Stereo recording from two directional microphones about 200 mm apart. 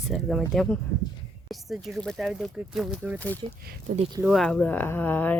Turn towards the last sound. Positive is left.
turn(degrees=10)  # may be behind; listen again after turning